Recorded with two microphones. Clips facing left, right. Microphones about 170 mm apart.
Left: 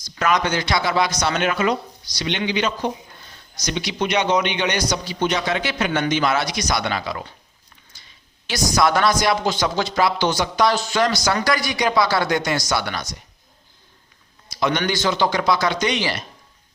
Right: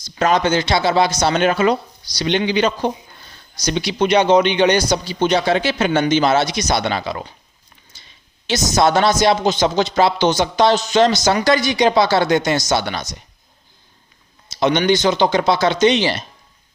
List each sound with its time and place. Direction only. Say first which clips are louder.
0.0 s speech: right 4 dB; 30° right (ahead or behind)
7.9 s a sound: right 4 dB; 25° right (ahead or behind)
8.4 s speech: right 3 dB; 25° right (ahead or behind)
14.5 s speech: right 6 dB; 25° right (ahead or behind)